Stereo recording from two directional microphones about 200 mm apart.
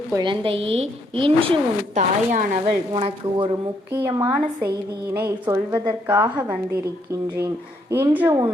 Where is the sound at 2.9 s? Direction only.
30° right (ahead or behind).